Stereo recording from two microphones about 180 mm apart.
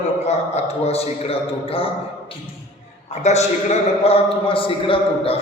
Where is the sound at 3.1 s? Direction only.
40° left (ahead or behind).